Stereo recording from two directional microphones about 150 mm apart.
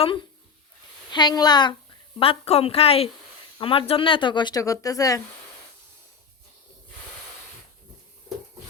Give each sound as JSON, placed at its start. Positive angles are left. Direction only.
{"t": 1.1, "sound": "a woman's voice", "side_deg": 30}